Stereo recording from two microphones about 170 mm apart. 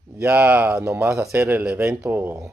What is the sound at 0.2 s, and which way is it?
Speech, 10° right (ahead or behind).